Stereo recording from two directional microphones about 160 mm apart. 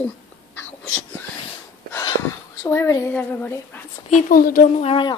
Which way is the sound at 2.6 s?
15° left (ahead or behind).